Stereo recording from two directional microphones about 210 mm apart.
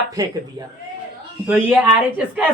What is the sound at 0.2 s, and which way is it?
Speech, 15° right (ahead or behind).